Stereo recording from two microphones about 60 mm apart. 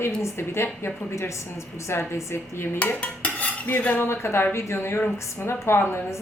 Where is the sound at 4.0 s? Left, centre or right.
Left.